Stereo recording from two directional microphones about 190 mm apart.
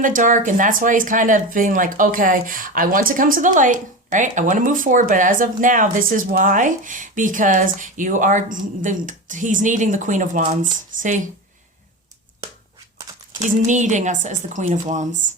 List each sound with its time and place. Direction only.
0.0 s speech: 45° right (ahead or behind)
13.6 s a woman's voice: 40° right (ahead or behind)